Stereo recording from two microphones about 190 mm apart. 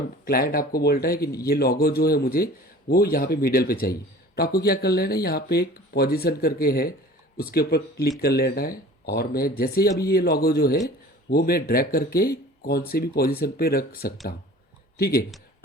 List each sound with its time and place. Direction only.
0.3 s speech: 50° left (ahead or behind)